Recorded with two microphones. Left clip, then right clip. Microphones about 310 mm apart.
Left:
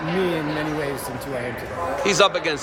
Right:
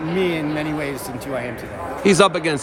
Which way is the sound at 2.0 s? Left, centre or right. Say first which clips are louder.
Right 3 dB; right.